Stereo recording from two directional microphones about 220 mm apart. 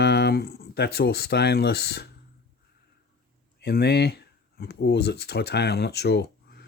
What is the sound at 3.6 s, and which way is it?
Speech, 45° left (ahead or behind).